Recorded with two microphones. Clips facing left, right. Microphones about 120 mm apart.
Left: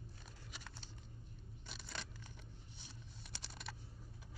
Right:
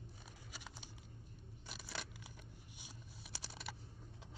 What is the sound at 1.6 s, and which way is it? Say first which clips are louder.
Scissors: right 2 dB; 5° right (ahead or behind).